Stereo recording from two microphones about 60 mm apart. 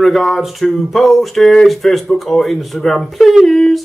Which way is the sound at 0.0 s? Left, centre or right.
Centre.